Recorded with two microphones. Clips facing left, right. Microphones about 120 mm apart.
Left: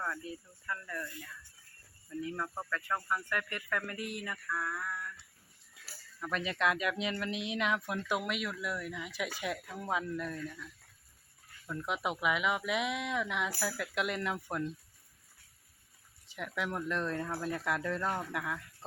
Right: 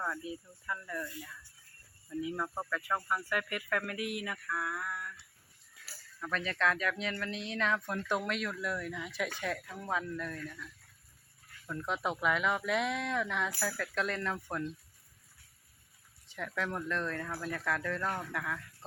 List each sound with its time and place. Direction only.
0.0 s speech: 10° right (ahead or behind)
6.1 s speech: 15° left (ahead or behind)
16.3 s speech: 10° left (ahead or behind)